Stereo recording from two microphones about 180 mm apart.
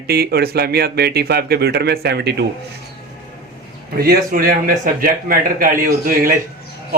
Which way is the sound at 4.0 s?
55° right (ahead or behind).